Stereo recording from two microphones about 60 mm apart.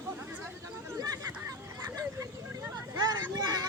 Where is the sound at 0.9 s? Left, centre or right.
Right.